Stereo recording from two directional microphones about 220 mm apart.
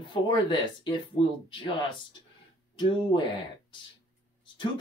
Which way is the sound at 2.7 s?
20° left (ahead or behind).